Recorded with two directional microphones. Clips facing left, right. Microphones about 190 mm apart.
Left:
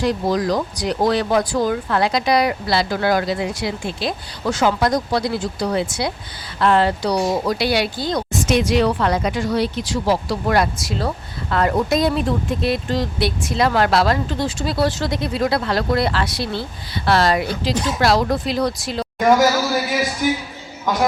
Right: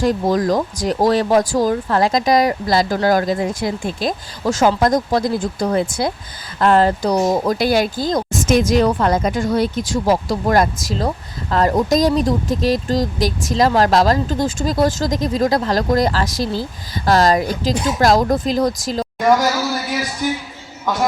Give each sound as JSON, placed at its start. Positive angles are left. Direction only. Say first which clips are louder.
{"t": 0.0, "sound": "speech", "louder": "right 3 dB", "side_deg": -45}